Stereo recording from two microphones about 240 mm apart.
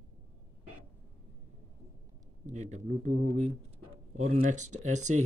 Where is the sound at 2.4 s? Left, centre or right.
Right.